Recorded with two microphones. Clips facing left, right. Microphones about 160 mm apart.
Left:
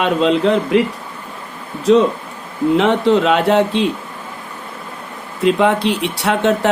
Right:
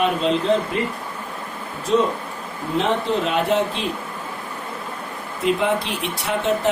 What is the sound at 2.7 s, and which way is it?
Speech, 85° left.